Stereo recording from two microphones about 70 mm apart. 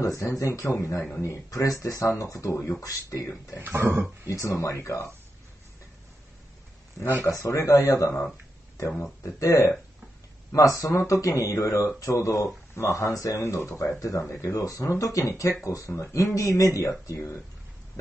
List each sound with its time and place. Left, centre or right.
0.0 s speech: left
2.8 s speech: left
3.6 s a sound: right
4.3 s speech: left
7.2 s speech: left
8.7 s speech: left
16.0 s speech: left